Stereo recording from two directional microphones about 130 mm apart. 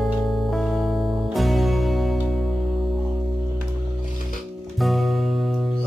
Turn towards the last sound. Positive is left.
turn(degrees=0)  # may be behind; listen again after turning